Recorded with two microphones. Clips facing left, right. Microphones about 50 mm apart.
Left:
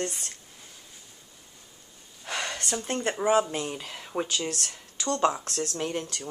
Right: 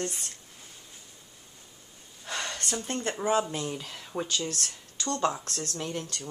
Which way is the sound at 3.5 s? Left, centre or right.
Left.